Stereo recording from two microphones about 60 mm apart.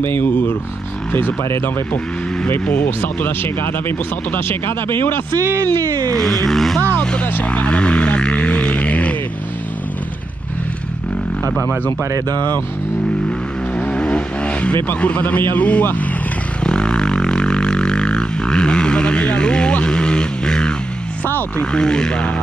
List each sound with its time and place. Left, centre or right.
0.0 s speech: left
2.7 s speech: left
5.8 s a sound: right
6.1 s speech: centre
6.9 s vehicle: centre
7.4 s a sound: centre
12.0 s speech: right
13.7 s vehicle: centre
15.0 s a man's voice: left
16.6 s music: centre
21.3 s speech: left
21.7 s vehicle: centre